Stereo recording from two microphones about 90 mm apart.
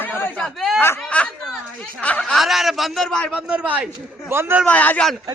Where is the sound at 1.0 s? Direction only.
15° left (ahead or behind).